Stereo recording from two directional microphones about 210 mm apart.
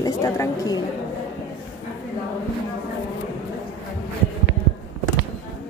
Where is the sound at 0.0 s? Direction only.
15° left (ahead or behind).